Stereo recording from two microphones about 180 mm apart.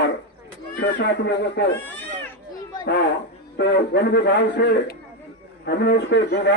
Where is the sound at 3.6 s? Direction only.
70° left (ahead or behind).